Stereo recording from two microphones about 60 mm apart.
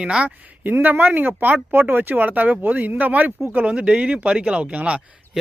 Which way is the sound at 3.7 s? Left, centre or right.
Centre.